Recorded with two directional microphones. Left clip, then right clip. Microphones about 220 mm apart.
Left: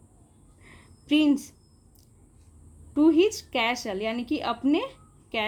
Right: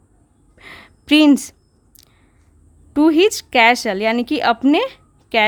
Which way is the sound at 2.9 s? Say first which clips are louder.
Right 7 dB; 45° right (ahead or behind).